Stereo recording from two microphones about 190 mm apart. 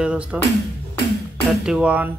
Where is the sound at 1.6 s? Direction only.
5° right (ahead or behind).